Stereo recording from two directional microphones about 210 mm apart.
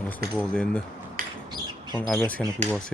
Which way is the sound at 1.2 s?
40° right (ahead or behind).